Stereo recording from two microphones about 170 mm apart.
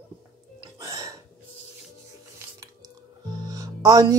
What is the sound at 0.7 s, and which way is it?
Burping, 20° right (ahead or behind).